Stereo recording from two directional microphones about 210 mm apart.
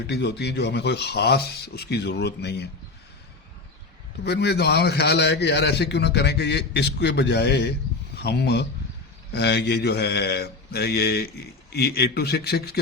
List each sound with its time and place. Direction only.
0.1 s a man's voice: 55° left (ahead or behind)
4.2 s a man's voice: 50° left (ahead or behind)